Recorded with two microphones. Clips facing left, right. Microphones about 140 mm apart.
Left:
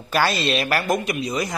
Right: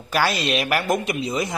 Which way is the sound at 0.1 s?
10° right (ahead or behind).